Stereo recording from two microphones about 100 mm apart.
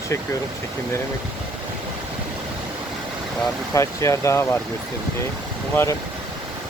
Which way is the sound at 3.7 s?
30° left (ahead or behind).